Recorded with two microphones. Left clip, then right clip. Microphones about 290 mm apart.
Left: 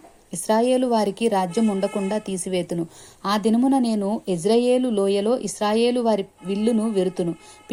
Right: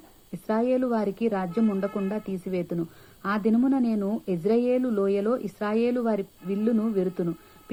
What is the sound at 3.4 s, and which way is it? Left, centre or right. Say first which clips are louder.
A woman's voice: left 3 dB; left.